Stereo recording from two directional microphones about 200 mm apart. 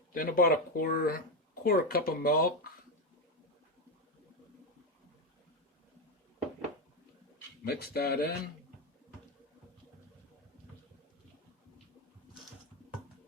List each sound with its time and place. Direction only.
0.1 s speech: 45° left (ahead or behind)
7.6 s speech: 50° left (ahead or behind)